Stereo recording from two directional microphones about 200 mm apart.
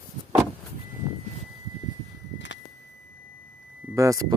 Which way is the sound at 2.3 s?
65° left (ahead or behind).